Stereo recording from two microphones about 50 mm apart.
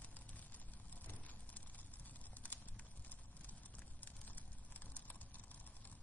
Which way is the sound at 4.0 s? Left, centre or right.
Left.